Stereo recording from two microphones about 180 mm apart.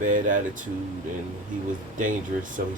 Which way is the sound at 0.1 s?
45° right (ahead or behind).